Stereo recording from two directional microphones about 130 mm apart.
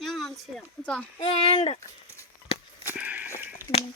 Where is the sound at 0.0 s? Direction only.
Centre (ahead or behind).